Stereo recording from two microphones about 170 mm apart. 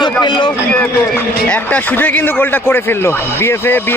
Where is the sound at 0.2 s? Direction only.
25° left (ahead or behind).